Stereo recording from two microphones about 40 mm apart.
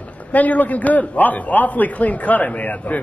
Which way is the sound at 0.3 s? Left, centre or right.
Left.